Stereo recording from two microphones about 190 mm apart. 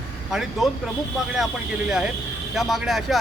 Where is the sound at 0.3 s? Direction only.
Centre (ahead or behind).